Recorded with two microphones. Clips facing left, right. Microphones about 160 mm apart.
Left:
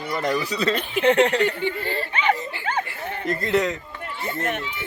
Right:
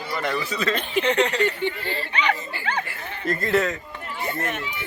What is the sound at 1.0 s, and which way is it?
Speech, 55° left (ahead or behind).